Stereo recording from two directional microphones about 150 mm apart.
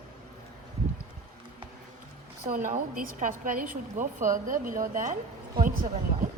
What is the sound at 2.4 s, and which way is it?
A woman's voice, 65° right (ahead or behind).